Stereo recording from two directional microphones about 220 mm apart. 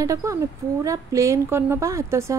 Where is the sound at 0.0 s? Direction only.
15° right (ahead or behind).